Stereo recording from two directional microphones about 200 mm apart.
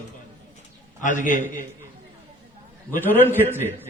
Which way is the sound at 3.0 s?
10° left (ahead or behind).